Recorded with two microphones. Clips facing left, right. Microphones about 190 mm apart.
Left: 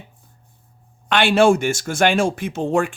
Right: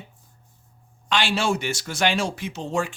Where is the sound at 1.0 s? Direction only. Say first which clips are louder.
Left 9 dB; 60° left (ahead or behind).